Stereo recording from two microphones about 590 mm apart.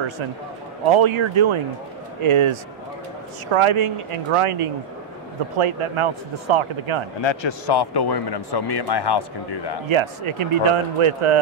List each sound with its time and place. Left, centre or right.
0.8 s speech: right
7.2 s speech: left
9.8 s speech: right